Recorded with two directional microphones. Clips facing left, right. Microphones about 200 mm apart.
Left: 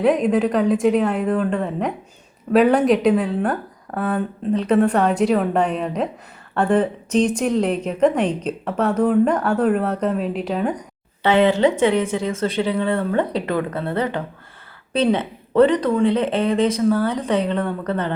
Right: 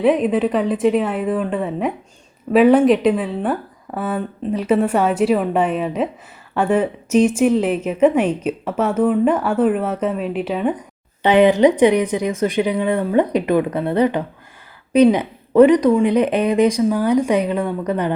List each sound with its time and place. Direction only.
0.0 s speech: centre (ahead or behind)
11.2 s a woman's voice: 15° right (ahead or behind)